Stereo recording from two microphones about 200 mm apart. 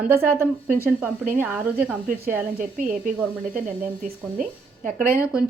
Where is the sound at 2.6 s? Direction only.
40° right (ahead or behind).